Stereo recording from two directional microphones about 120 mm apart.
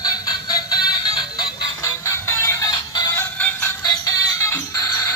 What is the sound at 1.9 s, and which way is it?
Music, 25° left (ahead or behind).